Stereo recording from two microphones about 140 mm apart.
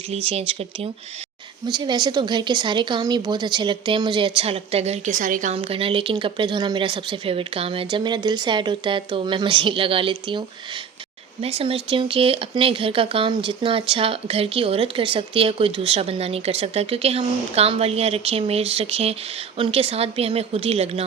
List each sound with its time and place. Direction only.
0.3 s speech: 45° right (ahead or behind)
1.6 s a woman's voice: 30° right (ahead or behind); by 5.5 s 70° right (ahead or behind)
5.5 s a woman's voice: 40° right (ahead or behind)
11.4 s speech: 45° right (ahead or behind)